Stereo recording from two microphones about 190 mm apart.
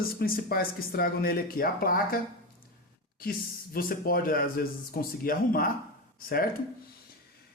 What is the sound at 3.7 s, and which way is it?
Speech, 50° left (ahead or behind).